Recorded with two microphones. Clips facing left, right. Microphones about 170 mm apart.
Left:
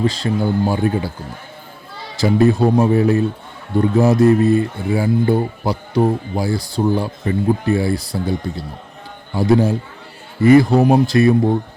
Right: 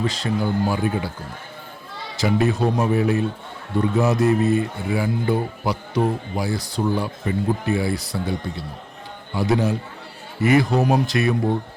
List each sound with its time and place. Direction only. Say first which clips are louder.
0.0 s speech: left 5 dB; 30° left (ahead or behind)
2.1 s speech: left 6 dB; 35° left (ahead or behind)
9.3 s speech: left 5 dB; 35° left (ahead or behind)